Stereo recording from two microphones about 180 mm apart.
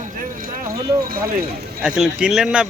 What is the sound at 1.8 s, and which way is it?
Speech, 5° right (ahead or behind).